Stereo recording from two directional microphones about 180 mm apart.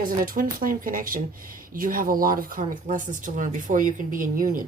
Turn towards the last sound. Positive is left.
turn(degrees=-50)  # may be behind; listen again after turning